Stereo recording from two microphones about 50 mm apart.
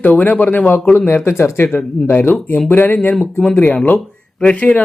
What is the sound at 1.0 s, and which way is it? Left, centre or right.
A man's voice, left.